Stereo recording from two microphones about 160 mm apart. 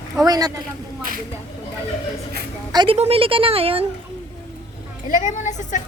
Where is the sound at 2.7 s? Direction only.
25° right (ahead or behind).